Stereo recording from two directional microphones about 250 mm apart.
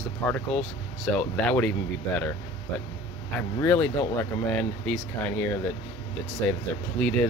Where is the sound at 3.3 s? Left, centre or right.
Centre.